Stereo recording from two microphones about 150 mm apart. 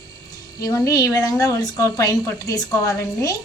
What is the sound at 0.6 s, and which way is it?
A woman's voice, 25° left (ahead or behind).